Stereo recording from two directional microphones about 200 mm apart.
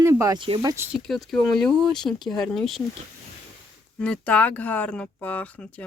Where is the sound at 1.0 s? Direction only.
Centre (ahead or behind).